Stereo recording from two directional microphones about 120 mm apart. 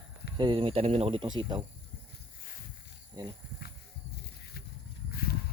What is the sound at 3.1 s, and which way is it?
Speech, 35° right (ahead or behind).